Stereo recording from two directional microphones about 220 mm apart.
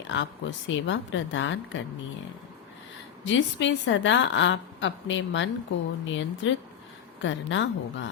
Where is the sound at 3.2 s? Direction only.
55° left (ahead or behind).